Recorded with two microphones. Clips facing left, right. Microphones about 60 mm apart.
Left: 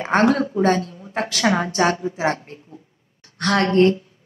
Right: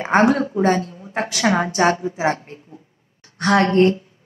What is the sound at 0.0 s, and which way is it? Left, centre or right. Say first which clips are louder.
A woman's voice: right 1 dB; centre.